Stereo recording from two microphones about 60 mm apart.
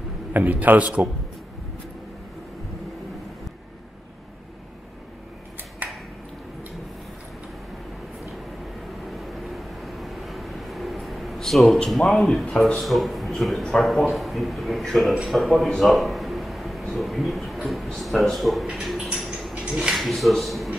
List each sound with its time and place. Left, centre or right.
0.3 s a man's voice: right
9.0 s vehicle: centre
11.9 s a man's voice: centre
12.8 s a man's voice: centre
15.8 s a sound: centre
16.9 s a man's voice: centre
19.2 s a sound: centre
19.5 s a sound: centre
20.0 s speech: centre